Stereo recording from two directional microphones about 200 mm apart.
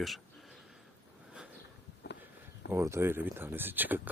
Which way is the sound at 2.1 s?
55° left (ahead or behind).